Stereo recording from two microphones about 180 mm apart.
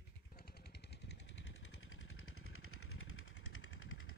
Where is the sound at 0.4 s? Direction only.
65° left (ahead or behind).